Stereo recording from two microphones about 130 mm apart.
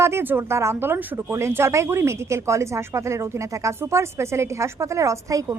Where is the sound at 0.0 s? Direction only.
20° right (ahead or behind).